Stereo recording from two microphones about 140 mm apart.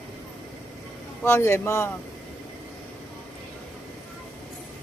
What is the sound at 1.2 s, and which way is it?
Speech, 20° left (ahead or behind).